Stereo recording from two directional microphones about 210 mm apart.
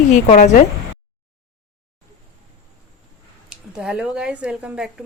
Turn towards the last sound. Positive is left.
turn(degrees=-5)  # may be behind; listen again after turning